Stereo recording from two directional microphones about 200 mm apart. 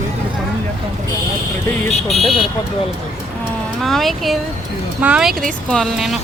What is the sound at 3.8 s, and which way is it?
Speech, centre (ahead or behind).